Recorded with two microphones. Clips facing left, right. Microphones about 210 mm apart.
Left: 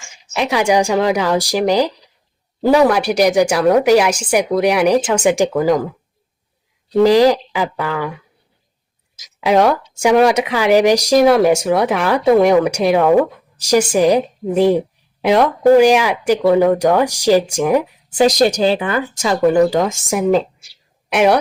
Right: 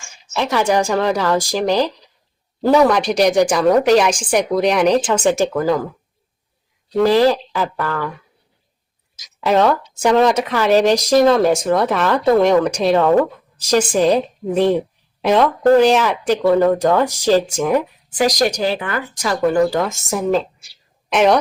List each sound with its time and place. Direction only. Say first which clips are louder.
0.2 s speech: left 1 dB; 15° left (ahead or behind)
6.9 s speech: left 3 dB; 15° left (ahead or behind)
9.4 s speech: left 2 dB; 10° left (ahead or behind)
18.1 s speech: left 4 dB; 25° left (ahead or behind); by 21.3 s 10° left (ahead or behind)